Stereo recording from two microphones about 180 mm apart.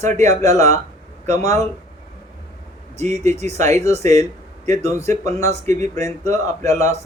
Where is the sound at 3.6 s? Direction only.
15° left (ahead or behind).